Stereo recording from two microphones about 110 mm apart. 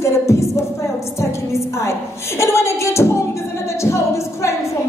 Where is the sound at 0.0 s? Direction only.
25° left (ahead or behind).